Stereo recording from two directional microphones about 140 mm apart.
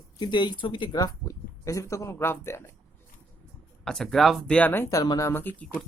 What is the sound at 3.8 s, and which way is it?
Speech, 5° left (ahead or behind).